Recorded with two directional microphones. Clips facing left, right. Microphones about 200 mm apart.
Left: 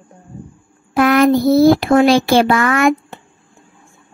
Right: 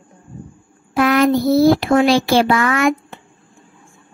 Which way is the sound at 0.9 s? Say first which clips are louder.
Left 2 dB; 50° left (ahead or behind).